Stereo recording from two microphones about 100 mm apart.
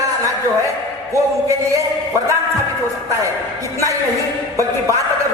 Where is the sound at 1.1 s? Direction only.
30° right (ahead or behind).